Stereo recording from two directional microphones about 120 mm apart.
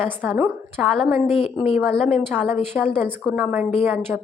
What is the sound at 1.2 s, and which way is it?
Speech, 50° left (ahead or behind).